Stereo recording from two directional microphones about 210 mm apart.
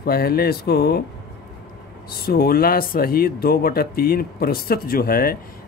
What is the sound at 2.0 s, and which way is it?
Speech, 45° left (ahead or behind).